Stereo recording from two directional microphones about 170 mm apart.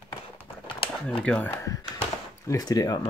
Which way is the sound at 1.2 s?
5° left (ahead or behind).